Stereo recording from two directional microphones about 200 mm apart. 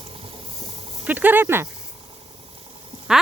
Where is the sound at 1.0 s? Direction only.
10° right (ahead or behind).